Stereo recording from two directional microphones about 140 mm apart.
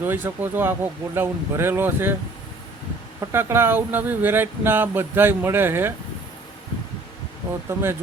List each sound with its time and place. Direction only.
0.0 s speech: 15° right (ahead or behind)
3.2 s speech: 15° right (ahead or behind)
7.7 s speech: 15° right (ahead or behind)